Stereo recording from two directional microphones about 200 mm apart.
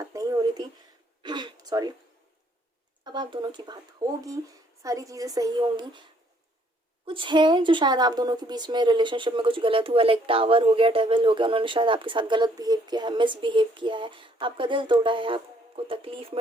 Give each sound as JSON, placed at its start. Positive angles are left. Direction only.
{"t": 0.0, "sound": "a sound", "side_deg": -15}
{"t": 1.7, "sound": "speech", "side_deg": -20}
{"t": 3.0, "sound": "a woman's voice", "side_deg": -20}
{"t": 7.0, "sound": "speech", "side_deg": -25}